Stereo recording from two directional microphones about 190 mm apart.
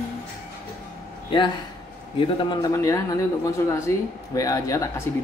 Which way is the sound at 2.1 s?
20° left (ahead or behind).